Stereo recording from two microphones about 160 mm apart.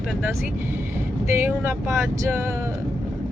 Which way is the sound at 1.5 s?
15° right (ahead or behind).